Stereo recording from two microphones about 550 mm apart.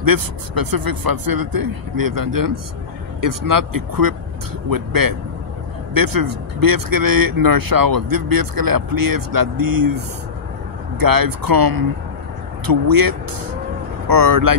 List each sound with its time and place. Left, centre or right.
0.0 s speech: right